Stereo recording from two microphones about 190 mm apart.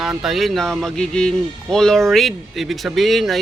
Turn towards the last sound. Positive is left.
turn(degrees=0)  # may be behind; listen again after turning